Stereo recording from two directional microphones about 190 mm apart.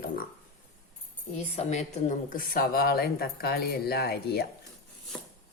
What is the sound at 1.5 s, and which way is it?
Speech, 35° left (ahead or behind).